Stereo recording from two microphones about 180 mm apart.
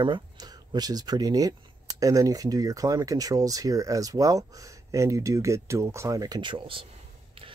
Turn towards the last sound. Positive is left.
turn(degrees=-30)  # may be behind; listen again after turning